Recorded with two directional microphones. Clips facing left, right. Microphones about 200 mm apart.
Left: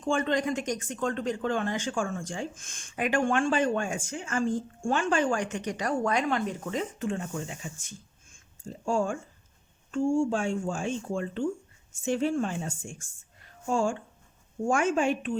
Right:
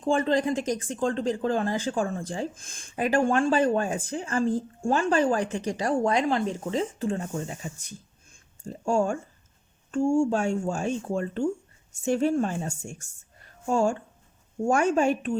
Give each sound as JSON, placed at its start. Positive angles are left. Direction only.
{"t": 0.0, "sound": "speech", "side_deg": -35}
{"t": 13.4, "sound": "a sound", "side_deg": -45}
{"t": 14.7, "sound": "speech", "side_deg": -40}